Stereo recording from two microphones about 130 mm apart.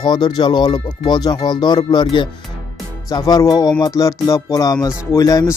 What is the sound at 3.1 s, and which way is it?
Speech, 30° left (ahead or behind).